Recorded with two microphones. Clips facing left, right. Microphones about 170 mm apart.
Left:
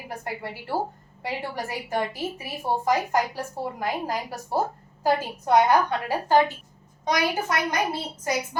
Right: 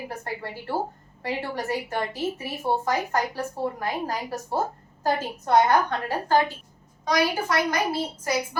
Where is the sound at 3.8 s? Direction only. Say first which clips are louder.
Left 1 dB; 10° left (ahead or behind).